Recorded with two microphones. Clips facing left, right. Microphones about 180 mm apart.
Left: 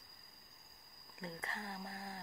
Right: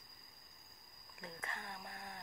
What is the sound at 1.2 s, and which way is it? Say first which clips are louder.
Speech: left 3 dB; 25° left (ahead or behind).